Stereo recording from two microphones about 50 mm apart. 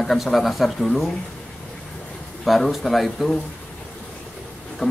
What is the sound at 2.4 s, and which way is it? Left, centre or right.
Speech, centre.